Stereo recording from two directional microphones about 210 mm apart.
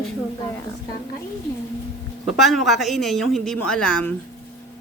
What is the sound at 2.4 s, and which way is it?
A man's voice, centre (ahead or behind).